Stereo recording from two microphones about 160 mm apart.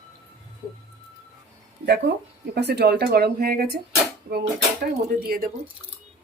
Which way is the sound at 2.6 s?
90° right.